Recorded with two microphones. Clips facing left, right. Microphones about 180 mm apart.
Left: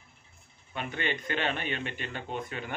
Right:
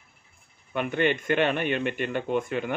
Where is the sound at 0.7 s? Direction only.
55° right (ahead or behind).